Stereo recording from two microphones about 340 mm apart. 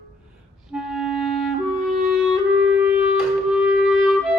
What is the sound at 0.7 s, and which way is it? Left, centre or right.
Clarinet, centre.